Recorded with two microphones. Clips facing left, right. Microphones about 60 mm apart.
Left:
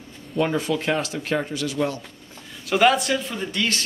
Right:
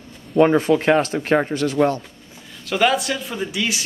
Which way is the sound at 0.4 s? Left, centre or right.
Right.